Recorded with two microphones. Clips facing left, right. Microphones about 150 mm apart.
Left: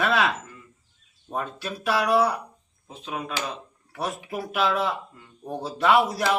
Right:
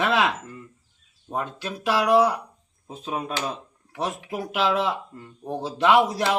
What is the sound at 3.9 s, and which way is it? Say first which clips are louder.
Speech: right 2 dB; 20° right (ahead or behind).